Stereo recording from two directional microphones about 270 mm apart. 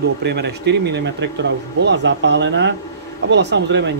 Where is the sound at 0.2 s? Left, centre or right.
Right.